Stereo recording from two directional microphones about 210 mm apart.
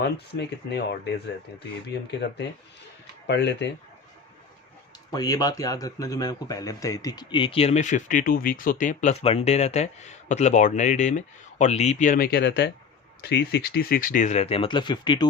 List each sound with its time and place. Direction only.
0.0 s speech: 50° left (ahead or behind)
5.1 s speech: 20° left (ahead or behind); by 12.4 s 40° left (ahead or behind)
12.4 s speech: 55° left (ahead or behind); by 15.3 s 20° left (ahead or behind)